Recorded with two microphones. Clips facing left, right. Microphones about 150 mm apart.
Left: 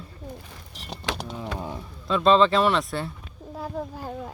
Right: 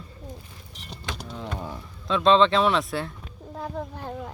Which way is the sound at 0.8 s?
70° left (ahead or behind).